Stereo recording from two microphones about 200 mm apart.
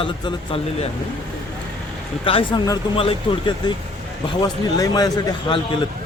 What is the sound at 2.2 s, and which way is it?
A man's voice, 25° left (ahead or behind).